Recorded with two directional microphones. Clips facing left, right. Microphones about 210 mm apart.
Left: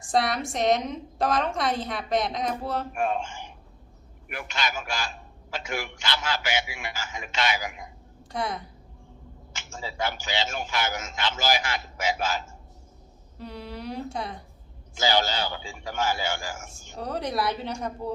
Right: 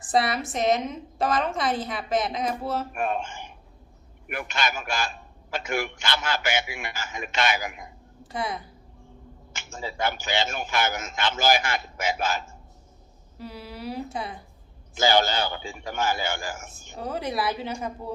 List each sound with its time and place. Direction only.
0.0 s a woman's voice: centre (ahead or behind)
3.0 s a man's voice: 60° right (ahead or behind)
8.3 s a woman's voice: centre (ahead or behind)
9.6 s a man's voice: 55° right (ahead or behind)
13.4 s speech: 5° right (ahead or behind)
14.9 s a man's voice: 55° right (ahead or behind)
16.9 s a woman's voice: centre (ahead or behind)